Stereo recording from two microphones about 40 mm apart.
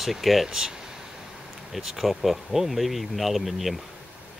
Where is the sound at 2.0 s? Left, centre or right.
Centre.